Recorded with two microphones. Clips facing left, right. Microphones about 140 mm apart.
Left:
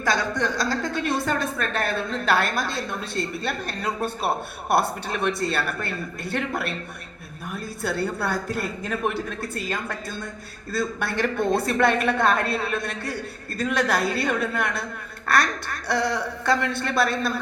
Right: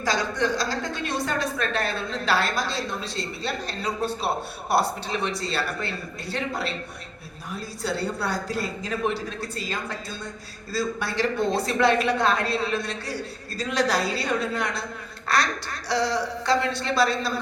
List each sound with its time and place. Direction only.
0.0 s a woman's voice: 55° left (ahead or behind)